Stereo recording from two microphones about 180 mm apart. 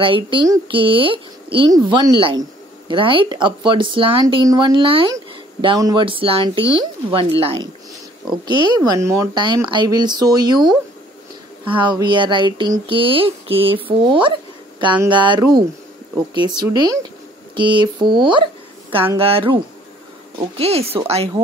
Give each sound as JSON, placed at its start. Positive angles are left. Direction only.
{"t": 0.0, "sound": "speech", "side_deg": -30}